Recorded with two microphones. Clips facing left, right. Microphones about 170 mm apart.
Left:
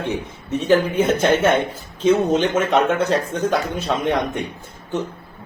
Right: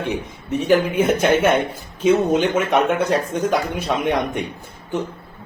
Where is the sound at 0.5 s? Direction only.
10° right (ahead or behind).